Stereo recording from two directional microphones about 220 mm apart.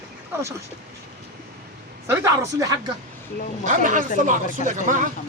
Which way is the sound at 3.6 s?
35° right (ahead or behind).